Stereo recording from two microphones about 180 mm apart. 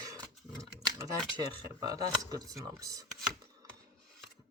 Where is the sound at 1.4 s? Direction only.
20° right (ahead or behind).